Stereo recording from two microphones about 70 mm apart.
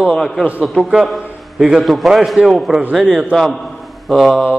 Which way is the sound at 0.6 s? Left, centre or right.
Centre.